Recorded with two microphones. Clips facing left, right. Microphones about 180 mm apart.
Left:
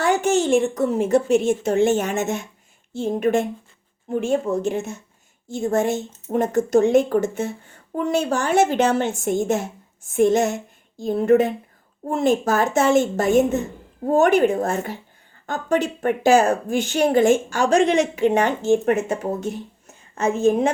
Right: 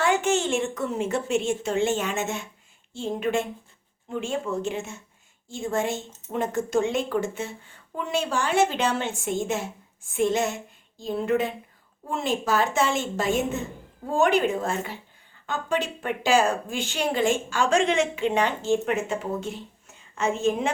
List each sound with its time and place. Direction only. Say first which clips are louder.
0.0 s speech: left 4 dB; 40° left (ahead or behind)